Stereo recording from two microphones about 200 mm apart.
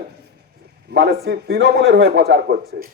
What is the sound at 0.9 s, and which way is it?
A man's voice, 55° right (ahead or behind).